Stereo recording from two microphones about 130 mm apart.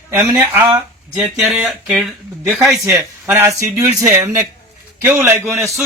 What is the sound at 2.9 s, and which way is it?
Speech, 20° right (ahead or behind).